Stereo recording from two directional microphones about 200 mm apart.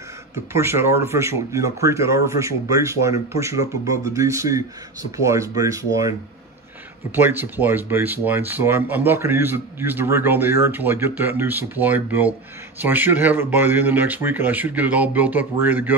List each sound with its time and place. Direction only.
0.5 s speech: 10° right (ahead or behind)
7.2 s speech: 10° right (ahead or behind)